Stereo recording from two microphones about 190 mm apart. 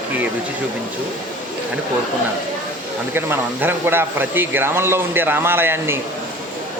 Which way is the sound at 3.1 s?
10° right (ahead or behind).